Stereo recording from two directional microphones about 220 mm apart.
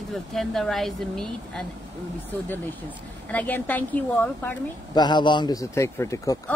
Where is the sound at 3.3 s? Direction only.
5° left (ahead or behind).